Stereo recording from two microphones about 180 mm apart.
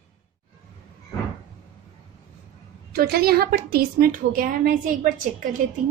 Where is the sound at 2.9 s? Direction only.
55° right (ahead or behind).